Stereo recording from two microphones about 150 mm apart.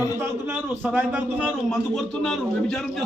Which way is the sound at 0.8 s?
10° right (ahead or behind).